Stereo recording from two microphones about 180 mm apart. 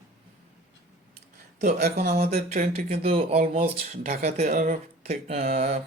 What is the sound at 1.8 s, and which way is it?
Speech, 60° right (ahead or behind).